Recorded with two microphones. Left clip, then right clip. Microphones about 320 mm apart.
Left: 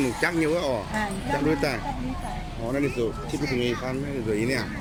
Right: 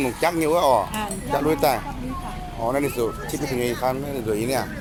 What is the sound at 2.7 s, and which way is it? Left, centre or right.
Speech, right.